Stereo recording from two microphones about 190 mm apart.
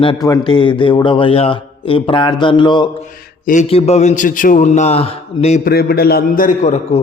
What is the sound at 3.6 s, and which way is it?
A man's voice, 30° left (ahead or behind).